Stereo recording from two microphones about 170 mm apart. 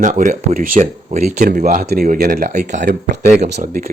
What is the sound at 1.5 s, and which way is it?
Speech, 65° right (ahead or behind).